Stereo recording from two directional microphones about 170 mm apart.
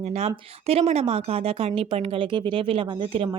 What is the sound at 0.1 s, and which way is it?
A woman's voice, 40° right (ahead or behind).